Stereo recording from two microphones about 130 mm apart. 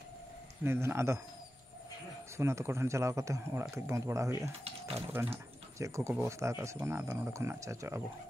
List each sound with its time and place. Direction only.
0.7 s speech: 20° right (ahead or behind)
2.3 s speech: 20° right (ahead or behind)